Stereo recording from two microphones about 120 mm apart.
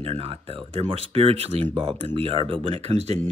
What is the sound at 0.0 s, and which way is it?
Speech, 55° right (ahead or behind).